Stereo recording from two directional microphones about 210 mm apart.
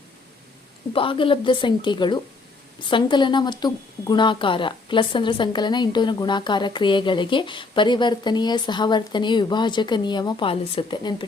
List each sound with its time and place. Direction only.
0.9 s speech: 25° left (ahead or behind)